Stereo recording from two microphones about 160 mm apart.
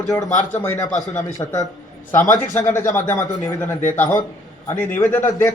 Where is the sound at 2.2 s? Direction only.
55° left (ahead or behind).